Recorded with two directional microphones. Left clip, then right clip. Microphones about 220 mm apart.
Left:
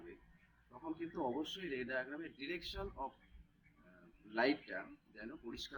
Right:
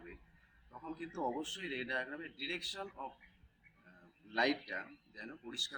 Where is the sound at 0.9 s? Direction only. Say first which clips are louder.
Right 2 dB; 15° right (ahead or behind).